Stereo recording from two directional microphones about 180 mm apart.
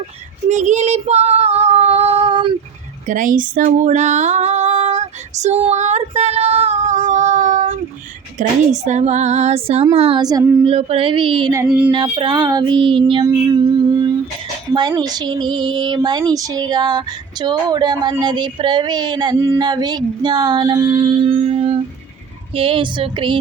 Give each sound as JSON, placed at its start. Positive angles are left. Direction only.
{"t": 0.4, "sound": "female singing", "side_deg": -40}
{"t": 3.1, "sound": "a sound", "side_deg": -45}
{"t": 8.4, "sound": "female singing", "side_deg": -40}
{"t": 10.2, "sound": "speech", "side_deg": -20}
{"t": 10.7, "sound": "speech", "side_deg": -35}
{"t": 11.6, "sound": "a sound", "side_deg": -5}
{"t": 11.9, "sound": "speech", "side_deg": -25}
{"t": 13.3, "sound": "music", "side_deg": -20}
{"t": 14.7, "sound": "speech", "side_deg": -25}